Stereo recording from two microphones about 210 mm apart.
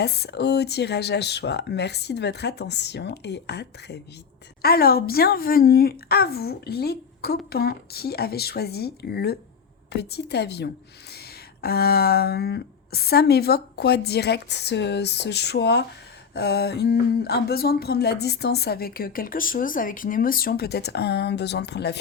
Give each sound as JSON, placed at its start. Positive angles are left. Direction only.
{"t": 0.0, "sound": "speech", "side_deg": 50}